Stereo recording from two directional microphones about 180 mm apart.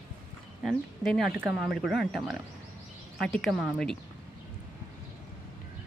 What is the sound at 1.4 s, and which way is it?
Speech, 5° right (ahead or behind).